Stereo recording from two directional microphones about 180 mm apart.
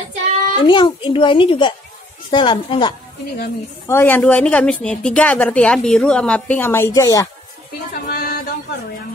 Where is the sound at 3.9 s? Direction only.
10° left (ahead or behind).